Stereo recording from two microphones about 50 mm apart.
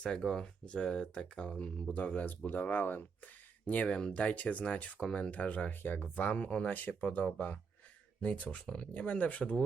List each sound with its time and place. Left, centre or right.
0.2 s speech: centre
0.7 s speech: centre; by 3.0 s left
3.8 s speech: left
8.6 s speech: centre
9.0 s speech: left